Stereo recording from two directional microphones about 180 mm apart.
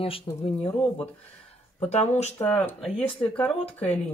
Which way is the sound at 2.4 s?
10° left (ahead or behind).